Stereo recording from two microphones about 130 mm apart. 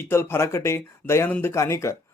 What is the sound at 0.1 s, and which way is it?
Speech, 20° left (ahead or behind).